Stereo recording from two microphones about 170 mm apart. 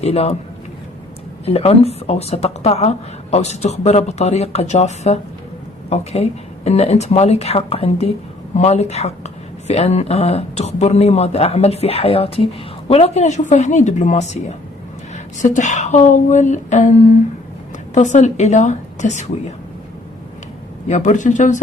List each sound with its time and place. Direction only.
0.0 s speech: 35° left (ahead or behind)
1.4 s speech: 35° left (ahead or behind)
15.4 s a woman's voice: 45° left (ahead or behind)
17.9 s a woman's voice: 45° left (ahead or behind)
20.9 s a woman's voice: 45° left (ahead or behind)